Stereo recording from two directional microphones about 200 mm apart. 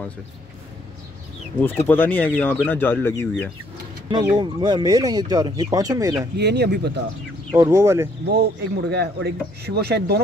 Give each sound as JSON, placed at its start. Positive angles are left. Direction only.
{"t": 1.9, "sound": "speech", "side_deg": 10}
{"t": 4.1, "sound": "speech", "side_deg": -20}
{"t": 6.3, "sound": "speech", "side_deg": -55}
{"t": 7.5, "sound": "speech", "side_deg": -15}
{"t": 8.3, "sound": "speech", "side_deg": -55}